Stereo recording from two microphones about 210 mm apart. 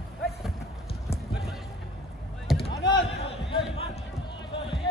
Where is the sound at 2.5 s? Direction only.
Centre (ahead or behind).